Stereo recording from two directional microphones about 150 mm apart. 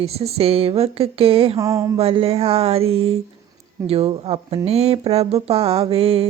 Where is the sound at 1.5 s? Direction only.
20° right (ahead or behind).